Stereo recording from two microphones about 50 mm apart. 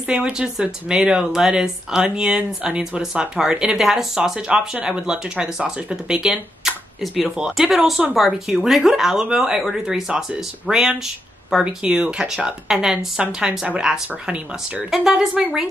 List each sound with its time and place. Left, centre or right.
0.0 s speech: centre
6.2 s speech: centre
11.5 s speech: centre